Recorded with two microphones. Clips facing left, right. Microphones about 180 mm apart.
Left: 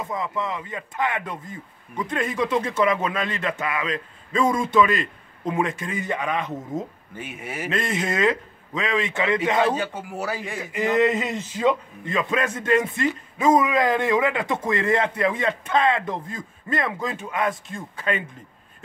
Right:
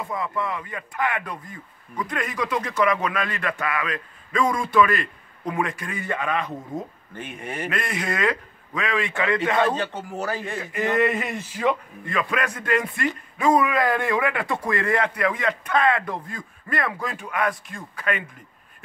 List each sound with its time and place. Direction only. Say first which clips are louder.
0.0 s speech: even; 20° left (ahead or behind)
7.2 s speech: right 1 dB; 5° left (ahead or behind)
7.7 s speech: left 5 dB; 25° left (ahead or behind)